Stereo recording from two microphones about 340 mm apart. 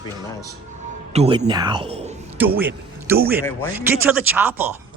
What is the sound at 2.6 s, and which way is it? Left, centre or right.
A man's voice, centre.